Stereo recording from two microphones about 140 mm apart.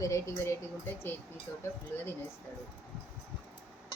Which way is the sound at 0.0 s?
20° left (ahead or behind).